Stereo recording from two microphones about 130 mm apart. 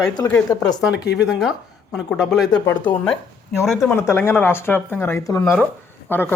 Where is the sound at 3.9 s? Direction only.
15° left (ahead or behind).